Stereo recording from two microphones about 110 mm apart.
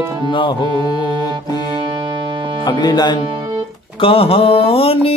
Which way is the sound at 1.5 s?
45° right (ahead or behind).